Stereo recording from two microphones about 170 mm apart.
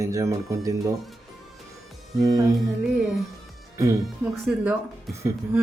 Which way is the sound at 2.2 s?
20° right (ahead or behind).